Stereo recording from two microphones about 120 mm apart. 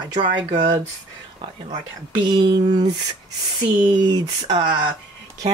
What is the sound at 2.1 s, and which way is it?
Speech, 40° right (ahead or behind).